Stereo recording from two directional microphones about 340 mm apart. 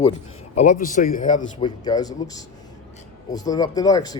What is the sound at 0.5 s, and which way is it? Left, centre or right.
A man's voice, left.